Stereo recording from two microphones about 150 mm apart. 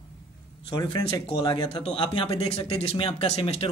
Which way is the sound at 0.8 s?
25° left (ahead or behind).